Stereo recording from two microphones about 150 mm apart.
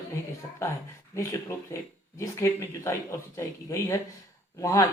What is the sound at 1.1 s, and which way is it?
Speech, 20° left (ahead or behind).